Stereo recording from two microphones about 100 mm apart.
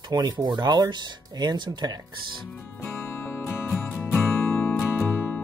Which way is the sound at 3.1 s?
20° left (ahead or behind).